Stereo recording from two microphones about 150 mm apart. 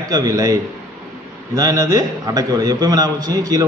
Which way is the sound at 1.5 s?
25° right (ahead or behind).